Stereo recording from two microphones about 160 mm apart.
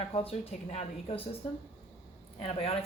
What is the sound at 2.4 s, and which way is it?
Speech, 40° left (ahead or behind).